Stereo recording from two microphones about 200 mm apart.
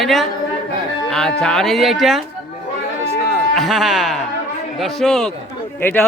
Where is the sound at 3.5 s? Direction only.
Centre (ahead or behind).